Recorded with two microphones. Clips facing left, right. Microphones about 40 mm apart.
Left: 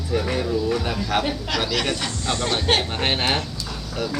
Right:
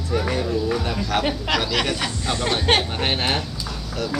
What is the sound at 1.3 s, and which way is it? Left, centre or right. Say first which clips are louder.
Speech: right 3 dB; right.